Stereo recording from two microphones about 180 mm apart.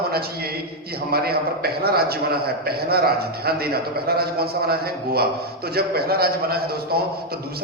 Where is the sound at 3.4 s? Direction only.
60° right (ahead or behind).